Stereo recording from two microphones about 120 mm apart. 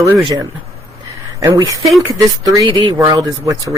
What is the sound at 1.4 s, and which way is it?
Speech, 25° right (ahead or behind).